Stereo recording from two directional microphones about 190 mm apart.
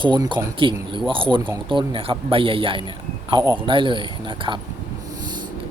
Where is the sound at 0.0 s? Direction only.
25° right (ahead or behind).